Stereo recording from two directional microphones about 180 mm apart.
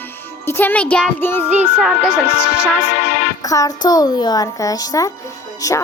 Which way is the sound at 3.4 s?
20° left (ahead or behind).